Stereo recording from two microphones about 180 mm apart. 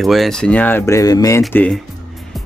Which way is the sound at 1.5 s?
10° left (ahead or behind).